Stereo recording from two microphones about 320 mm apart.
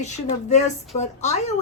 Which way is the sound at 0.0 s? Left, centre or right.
Left.